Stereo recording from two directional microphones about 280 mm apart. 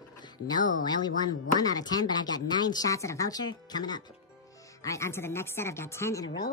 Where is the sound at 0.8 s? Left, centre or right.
Centre.